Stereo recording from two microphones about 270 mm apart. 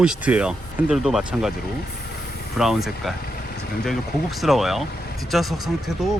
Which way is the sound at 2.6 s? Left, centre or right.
Centre.